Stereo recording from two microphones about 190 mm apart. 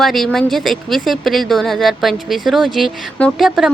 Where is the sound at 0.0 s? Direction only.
Centre (ahead or behind).